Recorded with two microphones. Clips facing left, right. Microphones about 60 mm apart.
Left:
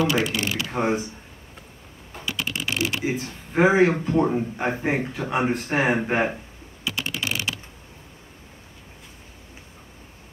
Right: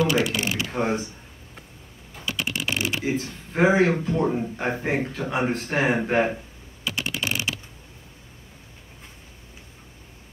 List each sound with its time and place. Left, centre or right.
0.4 s a sound: centre
0.7 s speech: centre
2.2 s mechanisms: centre
3.0 s a man's voice: centre
3.9 s speech: left
4.2 s a man's voice: centre
7.0 s typing: centre